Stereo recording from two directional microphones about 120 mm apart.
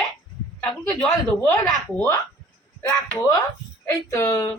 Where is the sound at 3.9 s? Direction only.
25° left (ahead or behind).